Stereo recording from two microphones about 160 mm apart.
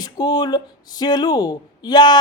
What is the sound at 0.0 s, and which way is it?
Speech, 25° left (ahead or behind).